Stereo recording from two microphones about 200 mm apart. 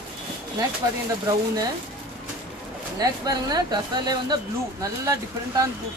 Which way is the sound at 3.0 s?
20° right (ahead or behind).